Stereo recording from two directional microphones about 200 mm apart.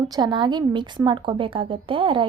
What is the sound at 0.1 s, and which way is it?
Speech, 20° right (ahead or behind).